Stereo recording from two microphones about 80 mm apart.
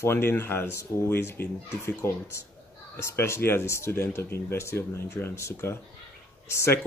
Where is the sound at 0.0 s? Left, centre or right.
Left.